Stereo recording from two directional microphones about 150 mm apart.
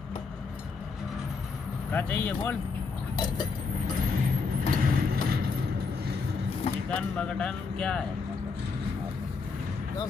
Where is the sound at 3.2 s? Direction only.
25° left (ahead or behind).